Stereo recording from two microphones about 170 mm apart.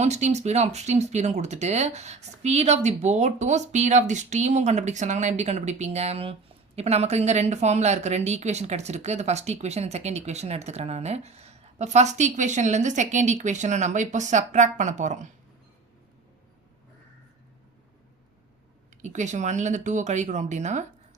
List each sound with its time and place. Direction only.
0.0 s speech: 40° right (ahead or behind)
19.0 s speech: 45° right (ahead or behind)